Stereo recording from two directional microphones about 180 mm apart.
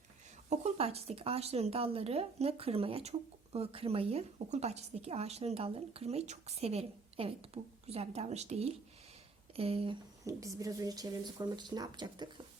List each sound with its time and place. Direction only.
0.5 s speech: 35° right (ahead or behind)
10.2 s speech: 20° right (ahead or behind)